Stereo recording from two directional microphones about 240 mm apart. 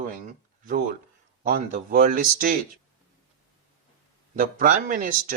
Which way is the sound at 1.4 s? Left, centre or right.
Right.